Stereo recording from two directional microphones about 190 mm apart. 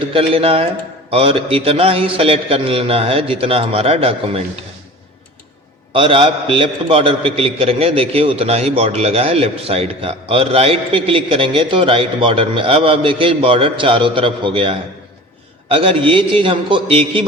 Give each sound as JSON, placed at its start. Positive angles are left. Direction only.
{"t": 0.0, "sound": "a man's voice", "side_deg": -30}
{"t": 5.9, "sound": "a man's voice", "side_deg": -30}